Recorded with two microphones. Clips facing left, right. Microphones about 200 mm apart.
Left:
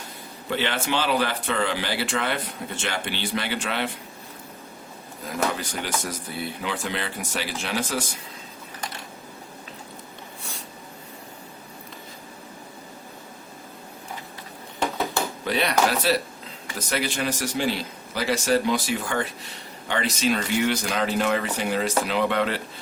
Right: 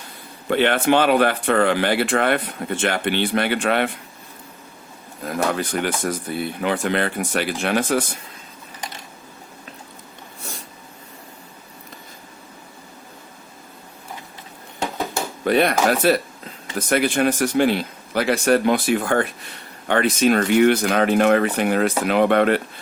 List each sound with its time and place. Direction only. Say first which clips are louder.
0.5 s speech: right 9 dB; 55° right (ahead or behind)
5.2 s speech: right 5 dB; 60° right (ahead or behind)
15.4 s speech: right 6 dB; 55° right (ahead or behind)